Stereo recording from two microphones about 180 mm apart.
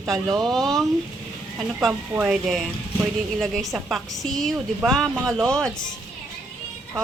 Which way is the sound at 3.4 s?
Centre (ahead or behind).